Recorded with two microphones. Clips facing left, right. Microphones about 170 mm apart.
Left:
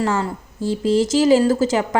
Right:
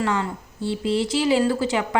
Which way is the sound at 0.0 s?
40° left (ahead or behind).